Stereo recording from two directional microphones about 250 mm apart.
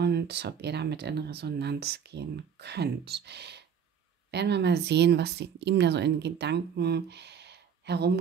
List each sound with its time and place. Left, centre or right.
0.0 s speech: right